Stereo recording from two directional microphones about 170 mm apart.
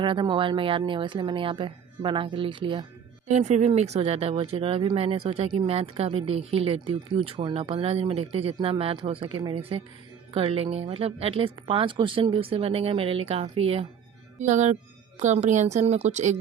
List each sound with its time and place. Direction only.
0.0 s speech: 30° right (ahead or behind)
3.2 s a woman's voice: 40° right (ahead or behind)